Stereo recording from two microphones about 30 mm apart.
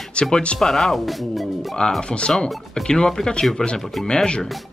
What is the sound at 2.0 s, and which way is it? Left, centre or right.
Speech, left.